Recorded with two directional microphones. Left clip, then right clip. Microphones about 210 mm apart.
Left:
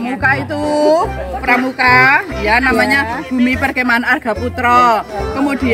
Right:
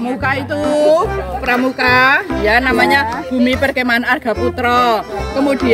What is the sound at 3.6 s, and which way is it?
Speech, 5° right (ahead or behind).